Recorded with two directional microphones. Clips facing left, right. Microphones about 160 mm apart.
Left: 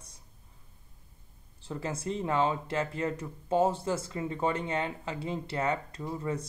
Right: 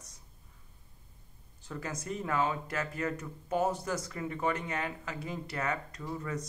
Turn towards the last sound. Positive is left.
turn(degrees=25)  # may be behind; listen again after turning